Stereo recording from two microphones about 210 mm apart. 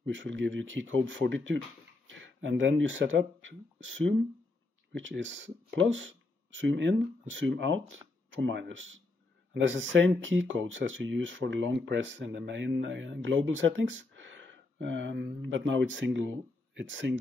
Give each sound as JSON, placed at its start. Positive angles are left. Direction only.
{"t": 0.0, "sound": "speech", "side_deg": -60}